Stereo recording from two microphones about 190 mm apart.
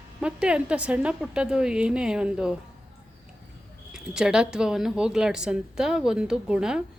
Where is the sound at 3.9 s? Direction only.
5° right (ahead or behind).